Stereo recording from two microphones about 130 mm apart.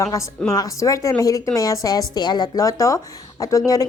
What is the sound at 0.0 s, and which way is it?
A woman's voice, 25° left (ahead or behind).